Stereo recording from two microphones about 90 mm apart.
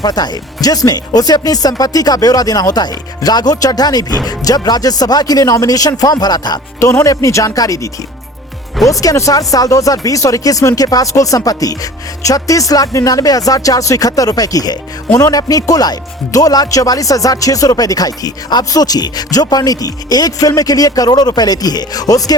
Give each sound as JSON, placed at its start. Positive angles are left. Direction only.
{"t": 0.0, "sound": "speech", "side_deg": 50}
{"t": 8.9, "sound": "speech", "side_deg": 40}